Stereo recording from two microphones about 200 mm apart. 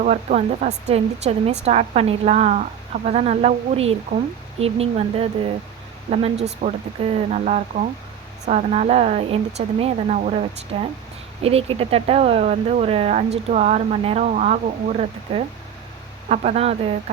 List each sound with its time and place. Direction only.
0.0 s speech: 35° right (ahead or behind)
6.4 s speech: 35° right (ahead or behind)